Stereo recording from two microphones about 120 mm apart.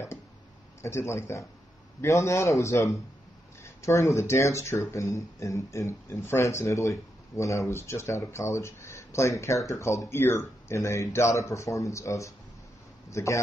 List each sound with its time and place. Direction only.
0.8 s speech: 20° left (ahead or behind)